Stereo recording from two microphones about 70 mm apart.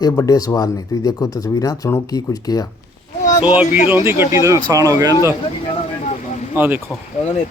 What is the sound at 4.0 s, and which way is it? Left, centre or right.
Speech, right.